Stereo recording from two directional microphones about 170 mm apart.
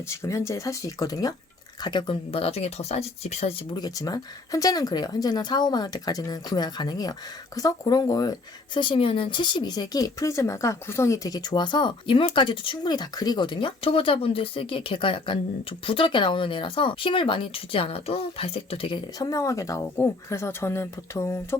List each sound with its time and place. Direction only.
0.1 s speech: 15° left (ahead or behind); by 3.6 s 35° left (ahead or behind)
3.8 s speech: 25° left (ahead or behind)
19.3 s speech: 20° left (ahead or behind)